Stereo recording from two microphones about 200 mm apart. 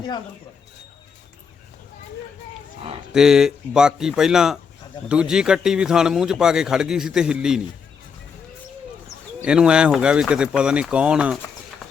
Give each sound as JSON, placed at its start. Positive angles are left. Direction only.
{"t": 3.1, "sound": "speech", "side_deg": -5}
{"t": 9.4, "sound": "speech", "side_deg": -5}
{"t": 11.8, "sound": "clip-clop", "side_deg": 0}